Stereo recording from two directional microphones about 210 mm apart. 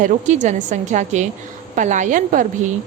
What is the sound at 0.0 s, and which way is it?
A woman's voice, 35° right (ahead or behind).